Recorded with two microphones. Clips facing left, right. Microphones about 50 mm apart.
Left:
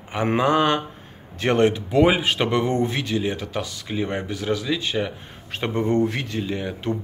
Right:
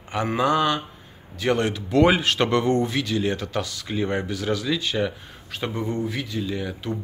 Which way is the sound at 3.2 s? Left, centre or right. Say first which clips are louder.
Right 1 dB; centre.